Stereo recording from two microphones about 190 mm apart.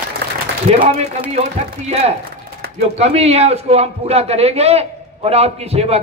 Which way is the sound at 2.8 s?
35° right (ahead or behind).